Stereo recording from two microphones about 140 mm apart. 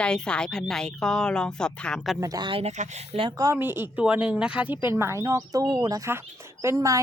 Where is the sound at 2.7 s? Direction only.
55° right (ahead or behind).